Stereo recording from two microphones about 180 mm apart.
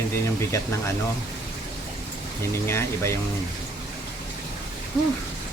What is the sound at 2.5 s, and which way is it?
Speech, 15° left (ahead or behind).